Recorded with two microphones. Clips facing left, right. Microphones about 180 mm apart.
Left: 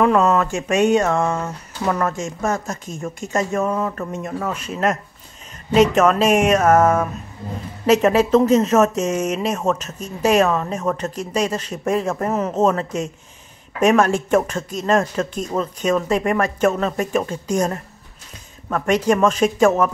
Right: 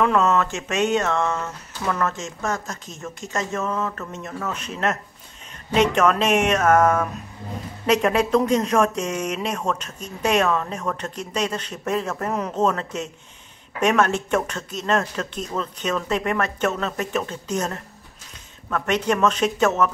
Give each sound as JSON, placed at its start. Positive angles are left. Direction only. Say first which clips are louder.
{"t": 0.0, "sound": "speech", "louder": "left 4 dB", "side_deg": 40}
{"t": 0.3, "sound": "speech", "louder": "left 4 dB", "side_deg": 10}
{"t": 1.2, "sound": "speech", "louder": "left 3 dB", "side_deg": 30}
{"t": 2.1, "sound": "speech", "louder": "left 5 dB", "side_deg": 15}
{"t": 3.2, "sound": "speech", "louder": "left 6 dB", "side_deg": 55}
{"t": 3.5, "sound": "speech", "louder": "left 5 dB", "side_deg": 15}